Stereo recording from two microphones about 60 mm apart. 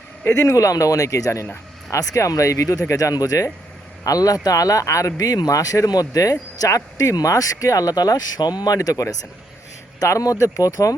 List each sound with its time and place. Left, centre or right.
0.3 s speech: left
0.5 s speech: left
6.6 s speech: left